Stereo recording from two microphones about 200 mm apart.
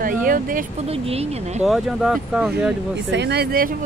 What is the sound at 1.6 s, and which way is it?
Speech, 5° right (ahead or behind).